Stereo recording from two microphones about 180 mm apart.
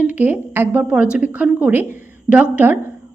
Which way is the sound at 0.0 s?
10° right (ahead or behind).